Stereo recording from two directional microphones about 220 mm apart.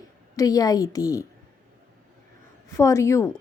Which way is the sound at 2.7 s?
15° left (ahead or behind).